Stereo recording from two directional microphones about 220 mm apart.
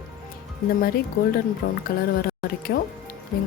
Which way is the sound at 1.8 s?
40° left (ahead or behind).